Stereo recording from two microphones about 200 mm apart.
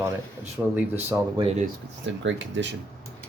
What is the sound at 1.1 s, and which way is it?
Speech, 25° right (ahead or behind).